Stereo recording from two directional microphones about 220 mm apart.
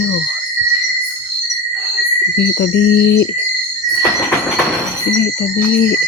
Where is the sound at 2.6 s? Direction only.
50° left (ahead or behind).